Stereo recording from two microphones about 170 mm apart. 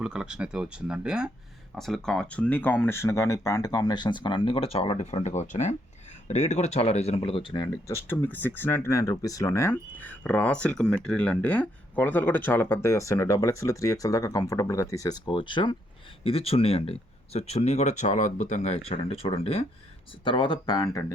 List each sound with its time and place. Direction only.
0.0 s speech: 5° right (ahead or behind); by 21.0 s 20° left (ahead or behind)